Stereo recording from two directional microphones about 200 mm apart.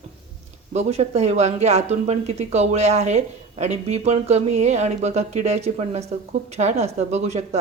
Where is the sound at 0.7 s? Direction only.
35° right (ahead or behind).